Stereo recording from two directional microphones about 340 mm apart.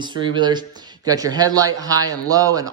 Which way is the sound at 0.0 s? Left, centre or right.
Centre.